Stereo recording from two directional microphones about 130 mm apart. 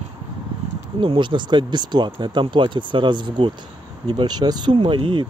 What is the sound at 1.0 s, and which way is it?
Speech, 40° right (ahead or behind).